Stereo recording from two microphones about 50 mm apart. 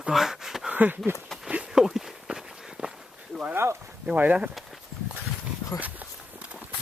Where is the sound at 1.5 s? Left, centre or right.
Right.